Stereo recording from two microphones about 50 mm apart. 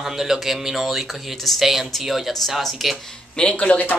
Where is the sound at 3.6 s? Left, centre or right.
Left.